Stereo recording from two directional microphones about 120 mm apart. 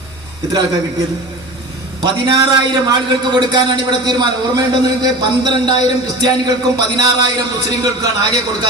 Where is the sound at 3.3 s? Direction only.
40° right (ahead or behind).